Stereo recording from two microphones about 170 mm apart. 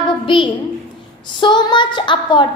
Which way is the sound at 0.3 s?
30° left (ahead or behind).